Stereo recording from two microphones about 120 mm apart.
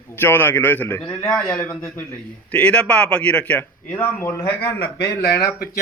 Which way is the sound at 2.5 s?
10° left (ahead or behind).